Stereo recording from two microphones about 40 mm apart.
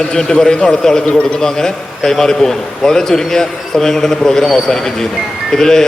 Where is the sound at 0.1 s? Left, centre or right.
Centre.